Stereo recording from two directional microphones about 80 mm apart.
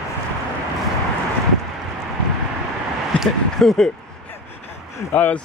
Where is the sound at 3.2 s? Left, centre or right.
Centre.